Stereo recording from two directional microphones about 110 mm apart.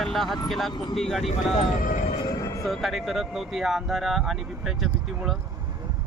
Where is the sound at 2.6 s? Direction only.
Centre (ahead or behind).